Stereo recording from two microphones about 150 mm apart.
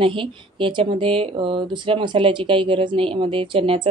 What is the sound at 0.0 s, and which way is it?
Speech, 35° right (ahead or behind).